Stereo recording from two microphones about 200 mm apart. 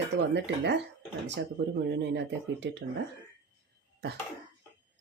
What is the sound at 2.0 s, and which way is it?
Speech, 60° right (ahead or behind).